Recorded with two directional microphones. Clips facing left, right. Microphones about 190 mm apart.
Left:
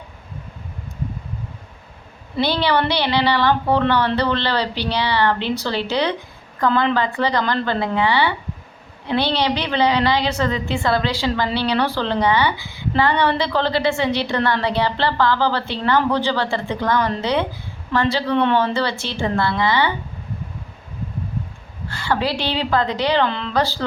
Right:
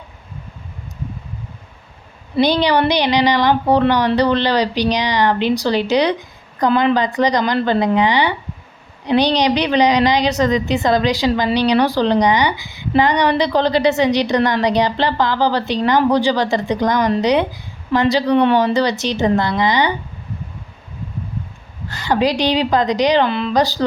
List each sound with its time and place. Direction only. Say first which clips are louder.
2.3 s a woman's voice: right 4 dB; 15° right (ahead or behind)
21.8 s a woman's voice: right 5 dB; 20° right (ahead or behind)